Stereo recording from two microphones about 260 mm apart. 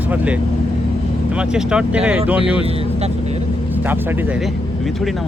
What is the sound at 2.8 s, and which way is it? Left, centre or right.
Speech, right.